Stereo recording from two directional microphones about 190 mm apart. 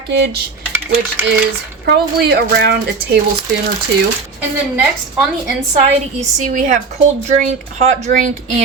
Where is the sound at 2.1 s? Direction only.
60° right (ahead or behind).